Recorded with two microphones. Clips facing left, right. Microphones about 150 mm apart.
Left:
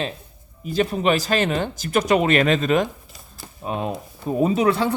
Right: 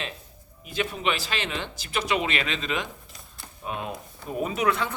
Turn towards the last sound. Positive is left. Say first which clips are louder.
# left 7 dB
turn(degrees=30)  # may be behind; listen again after turning